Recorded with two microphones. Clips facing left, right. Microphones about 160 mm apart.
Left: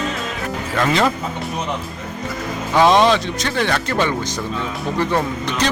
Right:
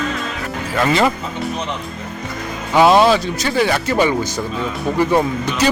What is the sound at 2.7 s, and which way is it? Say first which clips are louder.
Speech: right 2 dB; 5° right (ahead or behind).